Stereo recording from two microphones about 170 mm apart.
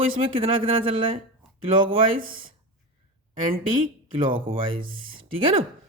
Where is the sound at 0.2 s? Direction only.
35° right (ahead or behind).